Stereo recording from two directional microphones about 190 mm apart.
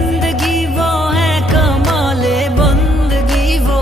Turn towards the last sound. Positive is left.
turn(degrees=0)  # may be behind; listen again after turning